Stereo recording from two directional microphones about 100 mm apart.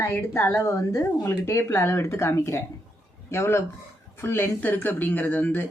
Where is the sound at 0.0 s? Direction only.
25° left (ahead or behind).